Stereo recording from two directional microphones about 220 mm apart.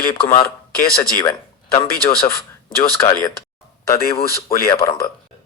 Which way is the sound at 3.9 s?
45° left (ahead or behind).